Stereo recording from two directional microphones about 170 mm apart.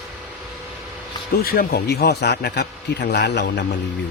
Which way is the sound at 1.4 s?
60° left (ahead or behind).